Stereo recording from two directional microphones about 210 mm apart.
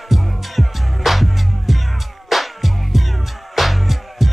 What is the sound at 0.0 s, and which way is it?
Music, centre (ahead or behind).